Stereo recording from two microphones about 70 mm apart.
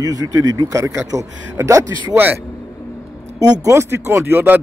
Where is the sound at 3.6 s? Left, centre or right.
Right.